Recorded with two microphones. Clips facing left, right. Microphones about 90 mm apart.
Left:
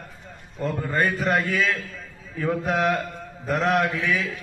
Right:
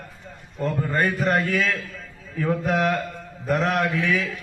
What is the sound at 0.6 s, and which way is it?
Speech, 5° left (ahead or behind).